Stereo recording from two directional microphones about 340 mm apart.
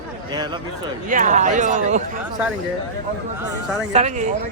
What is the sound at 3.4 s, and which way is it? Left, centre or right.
Speech, centre.